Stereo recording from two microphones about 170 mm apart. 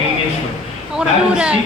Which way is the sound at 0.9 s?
5° right (ahead or behind).